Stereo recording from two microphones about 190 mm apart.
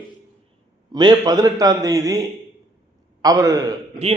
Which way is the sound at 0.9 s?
20° right (ahead or behind).